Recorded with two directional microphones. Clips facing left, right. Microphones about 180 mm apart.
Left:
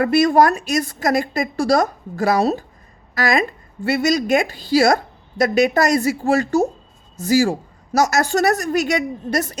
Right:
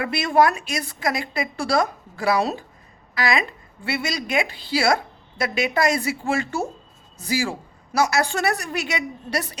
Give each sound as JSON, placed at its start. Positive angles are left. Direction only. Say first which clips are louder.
{"t": 0.0, "sound": "a woman's voice", "louder": "left 5 dB", "side_deg": 45}